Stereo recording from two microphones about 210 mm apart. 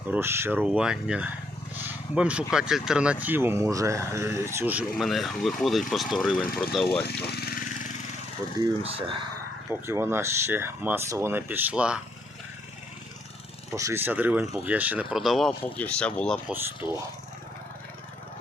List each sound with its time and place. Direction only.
0.1 s speech: 10° right (ahead or behind)
6.4 s speech: 45° left (ahead or behind)
7.3 s a sound: 50° left (ahead or behind)
8.8 s speech: 25° right (ahead or behind)
9.6 s speech: 10° right (ahead or behind)
13.7 s speech: 15° right (ahead or behind); by 16.4 s 5° left (ahead or behind)
16.8 s speech: 10° right (ahead or behind)